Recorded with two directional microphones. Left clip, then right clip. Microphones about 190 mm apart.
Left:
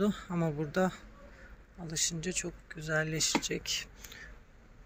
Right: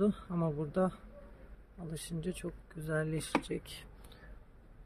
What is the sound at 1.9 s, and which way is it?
Speech, 25° right (ahead or behind).